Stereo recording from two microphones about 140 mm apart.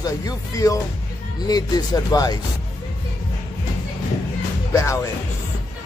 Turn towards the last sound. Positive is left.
turn(degrees=20)  # may be behind; listen again after turning